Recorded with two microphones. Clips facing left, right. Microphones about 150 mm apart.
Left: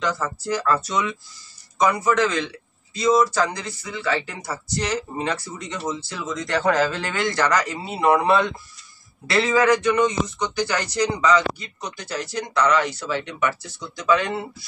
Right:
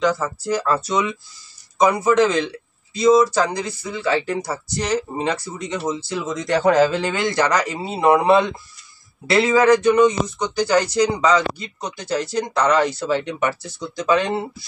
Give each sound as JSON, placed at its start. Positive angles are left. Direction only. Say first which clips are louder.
{"t": 0.0, "sound": "speech", "louder": "right 5 dB", "side_deg": -10}
{"t": 1.8, "sound": "speech", "louder": "right 4 dB", "side_deg": -20}
{"t": 10.7, "sound": "speech", "louder": "right 6 dB", "side_deg": -30}